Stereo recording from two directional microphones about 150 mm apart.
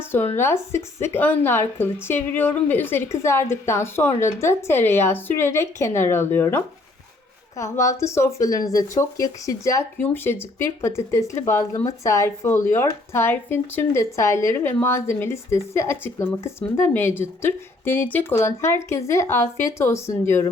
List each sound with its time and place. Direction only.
0.0 s speech: 15° left (ahead or behind)